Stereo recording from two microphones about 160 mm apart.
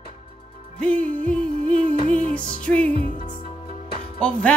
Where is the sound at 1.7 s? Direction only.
40° right (ahead or behind).